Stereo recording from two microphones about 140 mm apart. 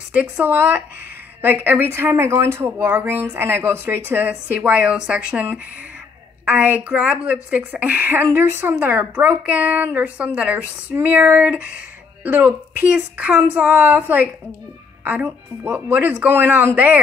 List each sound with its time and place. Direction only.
0.1 s speech: 10° right (ahead or behind)